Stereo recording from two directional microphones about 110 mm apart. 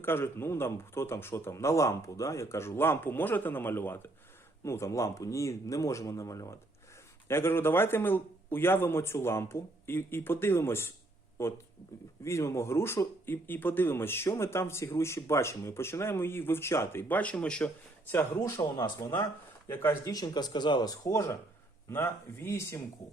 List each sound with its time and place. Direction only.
0.0 s speech: 20° left (ahead or behind)
18.1 s speech: 25° left (ahead or behind)
20.1 s speech: 35° left (ahead or behind)